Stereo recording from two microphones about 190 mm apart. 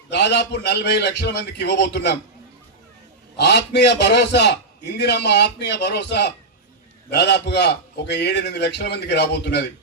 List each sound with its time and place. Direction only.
0.1 s a man's voice: 65° left (ahead or behind)
3.3 s a man's voice: 60° left (ahead or behind)